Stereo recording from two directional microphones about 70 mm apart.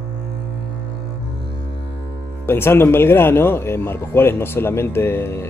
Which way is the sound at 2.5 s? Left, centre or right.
Left.